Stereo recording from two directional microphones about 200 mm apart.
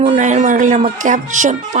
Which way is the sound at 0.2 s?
35° right (ahead or behind).